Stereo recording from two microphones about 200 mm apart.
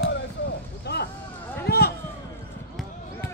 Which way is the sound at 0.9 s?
55° left (ahead or behind).